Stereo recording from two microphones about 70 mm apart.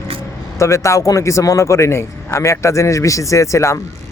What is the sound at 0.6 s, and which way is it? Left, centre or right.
Speech, left.